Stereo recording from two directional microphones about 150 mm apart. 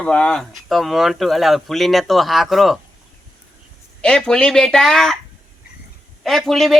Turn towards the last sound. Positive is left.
turn(degrees=0)  # may be behind; listen again after turning